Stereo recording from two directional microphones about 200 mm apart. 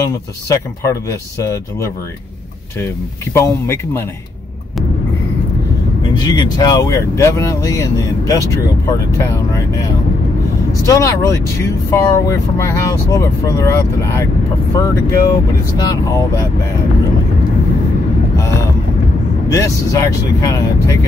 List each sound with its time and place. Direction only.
0.0 s speech: 15° left (ahead or behind)
3.3 s speech: 15° left (ahead or behind)
6.2 s speech: 20° left (ahead or behind)
10.9 s speech: 15° left (ahead or behind)
19.5 s speech: 15° left (ahead or behind)